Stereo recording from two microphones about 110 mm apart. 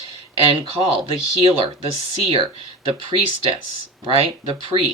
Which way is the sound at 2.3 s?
50° right (ahead or behind).